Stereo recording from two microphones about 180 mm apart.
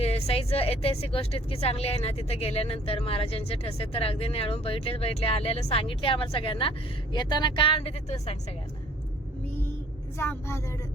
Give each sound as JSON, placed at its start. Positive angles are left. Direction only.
{"t": 0.0, "sound": "speech", "side_deg": 35}
{"t": 10.2, "sound": "speech", "side_deg": 15}